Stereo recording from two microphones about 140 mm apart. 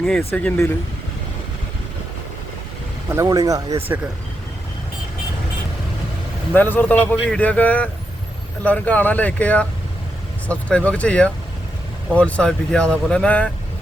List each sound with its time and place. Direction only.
0.2 s speech: 15° left (ahead or behind)
3.1 s speech: 20° right (ahead or behind)
6.5 s speech: 15° left (ahead or behind)